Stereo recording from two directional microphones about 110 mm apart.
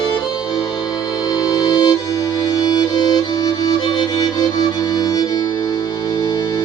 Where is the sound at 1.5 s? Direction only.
45° left (ahead or behind).